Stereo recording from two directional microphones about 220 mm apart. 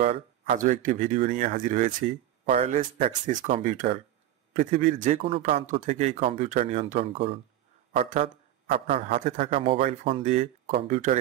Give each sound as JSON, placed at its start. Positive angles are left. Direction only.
{"t": 0.0, "sound": "a man's voice", "side_deg": -30}